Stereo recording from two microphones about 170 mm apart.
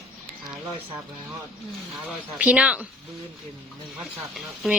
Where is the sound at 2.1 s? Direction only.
10° right (ahead or behind).